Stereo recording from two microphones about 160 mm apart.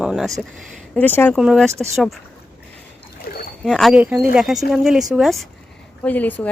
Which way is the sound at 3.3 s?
65° left (ahead or behind).